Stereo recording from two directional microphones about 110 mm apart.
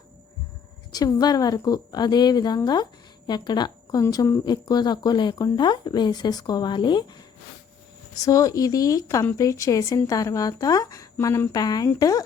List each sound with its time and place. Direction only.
0.9 s a woman's voice: 35° left (ahead or behind)
8.2 s speech: 30° left (ahead or behind)